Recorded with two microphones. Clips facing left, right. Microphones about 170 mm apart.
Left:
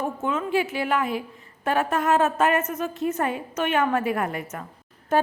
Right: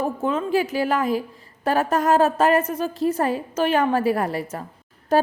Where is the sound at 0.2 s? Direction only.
35° right (ahead or behind).